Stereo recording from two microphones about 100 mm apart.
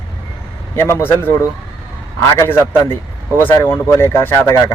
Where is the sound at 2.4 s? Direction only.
25° left (ahead or behind).